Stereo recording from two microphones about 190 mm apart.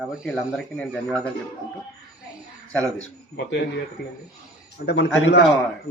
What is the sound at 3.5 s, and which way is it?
Speech, 65° left (ahead or behind).